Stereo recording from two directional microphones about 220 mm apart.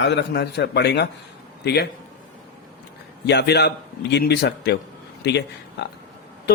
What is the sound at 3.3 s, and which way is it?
A man's voice, 50° left (ahead or behind).